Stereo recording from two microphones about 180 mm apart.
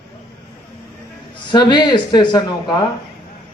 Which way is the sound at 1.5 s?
25° left (ahead or behind).